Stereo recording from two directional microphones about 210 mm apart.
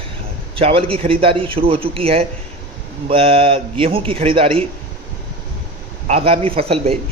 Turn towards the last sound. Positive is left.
turn(degrees=-30)  # may be behind; listen again after turning